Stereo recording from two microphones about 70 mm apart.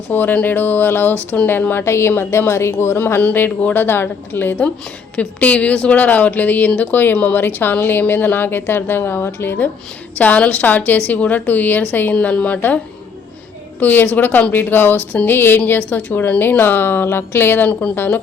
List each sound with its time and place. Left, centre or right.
0.1 s speech: left
3.2 s speech: left
3.8 s speech: left
17.7 s speech: centre